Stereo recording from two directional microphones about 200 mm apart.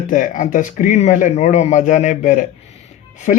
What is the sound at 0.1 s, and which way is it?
A man's voice, 40° left (ahead or behind).